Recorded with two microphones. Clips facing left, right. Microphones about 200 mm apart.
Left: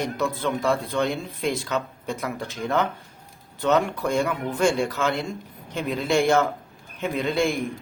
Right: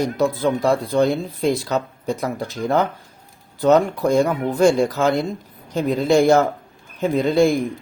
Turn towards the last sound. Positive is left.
turn(degrees=-40)  # may be behind; listen again after turning